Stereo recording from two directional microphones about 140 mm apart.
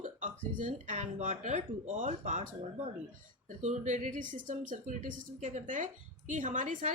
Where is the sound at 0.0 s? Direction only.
65° right (ahead or behind).